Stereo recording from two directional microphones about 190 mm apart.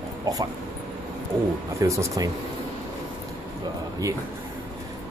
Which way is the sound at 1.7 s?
15° right (ahead or behind).